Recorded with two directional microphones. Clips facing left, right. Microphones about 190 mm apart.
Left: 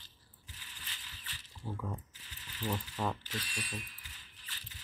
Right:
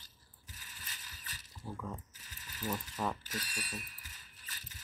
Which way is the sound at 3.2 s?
40° right (ahead or behind).